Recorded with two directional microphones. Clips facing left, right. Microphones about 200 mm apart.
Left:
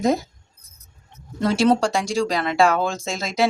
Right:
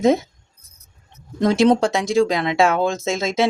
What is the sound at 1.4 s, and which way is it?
Speech, 15° right (ahead or behind).